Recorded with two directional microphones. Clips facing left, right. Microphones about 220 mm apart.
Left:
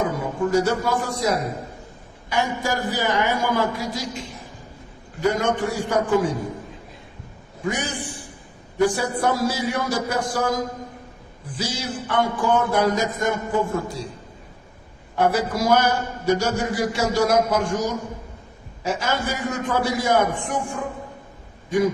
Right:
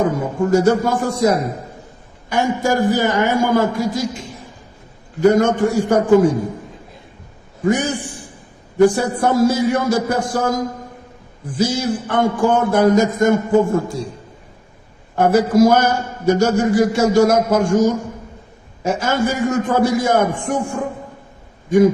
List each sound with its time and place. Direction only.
0.0 s a man's voice: 45° right (ahead or behind)
5.2 s a man's voice: 45° right (ahead or behind)
7.7 s a man's voice: 45° right (ahead or behind)
15.1 s a man's voice: 45° right (ahead or behind)